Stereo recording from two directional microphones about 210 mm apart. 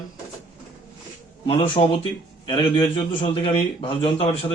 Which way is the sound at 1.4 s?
25° left (ahead or behind).